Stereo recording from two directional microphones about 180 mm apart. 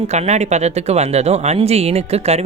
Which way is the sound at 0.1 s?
40° right (ahead or behind).